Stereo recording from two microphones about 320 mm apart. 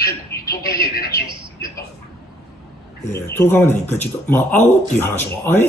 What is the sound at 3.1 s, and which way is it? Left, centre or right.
Speech, centre.